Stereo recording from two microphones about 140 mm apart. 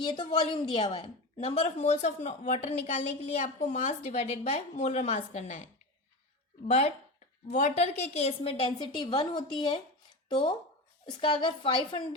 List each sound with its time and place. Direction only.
0.0 s a woman's voice: 35° left (ahead or behind); by 5.6 s 55° left (ahead or behind)
6.7 s a woman's voice: 55° left (ahead or behind); by 11.9 s 35° left (ahead or behind)